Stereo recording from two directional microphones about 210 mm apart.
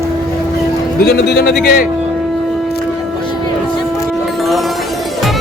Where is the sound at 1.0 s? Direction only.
50° left (ahead or behind).